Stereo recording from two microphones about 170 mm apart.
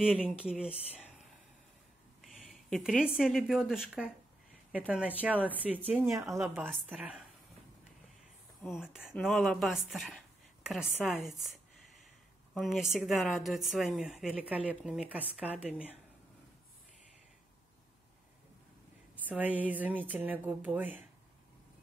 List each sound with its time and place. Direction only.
0.1 s speech: 10° left (ahead or behind)
0.4 s a woman's voice: 5° right (ahead or behind)
2.2 s a sound: centre (ahead or behind)
3.2 s a woman's voice: 5° right (ahead or behind)
8.6 s a woman's voice: 5° right (ahead or behind)
12.9 s a woman's voice: centre (ahead or behind)
19.1 s a woman's voice: 10° right (ahead or behind)